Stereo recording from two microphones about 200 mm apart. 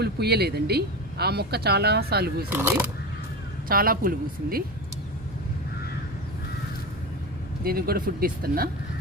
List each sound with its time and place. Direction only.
0.0 s speech: 55° right (ahead or behind)
2.5 s speech: 10° right (ahead or behind)
3.7 s speech: 45° right (ahead or behind)
7.6 s speech: 50° right (ahead or behind)